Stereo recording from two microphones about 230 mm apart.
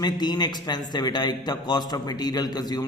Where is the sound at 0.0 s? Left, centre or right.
Centre.